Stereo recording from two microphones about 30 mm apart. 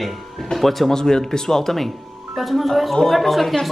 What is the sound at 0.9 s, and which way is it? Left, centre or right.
Speech, centre.